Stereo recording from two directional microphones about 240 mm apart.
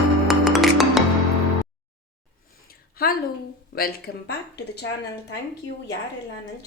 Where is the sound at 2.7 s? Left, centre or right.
Left.